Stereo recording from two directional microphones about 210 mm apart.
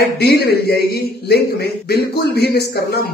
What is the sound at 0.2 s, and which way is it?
Speech, 50° left (ahead or behind).